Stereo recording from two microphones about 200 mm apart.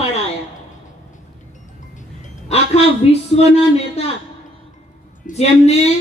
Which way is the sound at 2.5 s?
30° left (ahead or behind).